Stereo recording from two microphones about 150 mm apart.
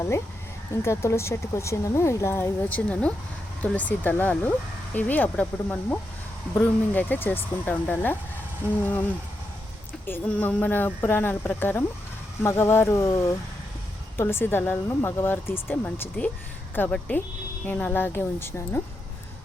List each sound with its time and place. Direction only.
0.8 s speech: 15° left (ahead or behind)
10.1 s speech: 10° left (ahead or behind)